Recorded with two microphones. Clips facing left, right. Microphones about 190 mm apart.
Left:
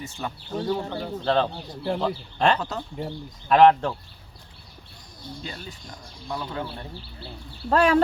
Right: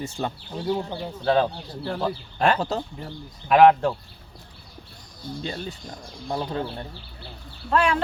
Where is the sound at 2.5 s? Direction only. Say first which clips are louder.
Right 4 dB; 30° right (ahead or behind).